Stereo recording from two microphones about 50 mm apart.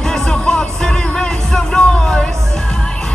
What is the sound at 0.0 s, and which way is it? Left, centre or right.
Music, centre.